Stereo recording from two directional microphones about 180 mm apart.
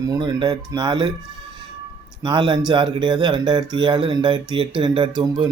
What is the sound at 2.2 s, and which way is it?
Speech, 25° right (ahead or behind).